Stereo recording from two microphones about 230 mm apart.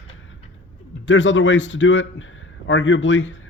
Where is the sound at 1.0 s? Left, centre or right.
Left.